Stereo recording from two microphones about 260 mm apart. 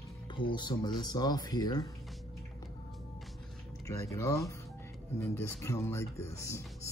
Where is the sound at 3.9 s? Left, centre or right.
Centre.